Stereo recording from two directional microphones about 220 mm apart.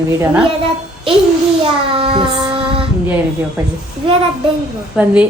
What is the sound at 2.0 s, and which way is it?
Child singing, 25° right (ahead or behind).